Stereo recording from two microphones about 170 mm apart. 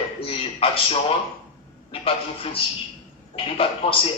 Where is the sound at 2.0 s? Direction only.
35° left (ahead or behind).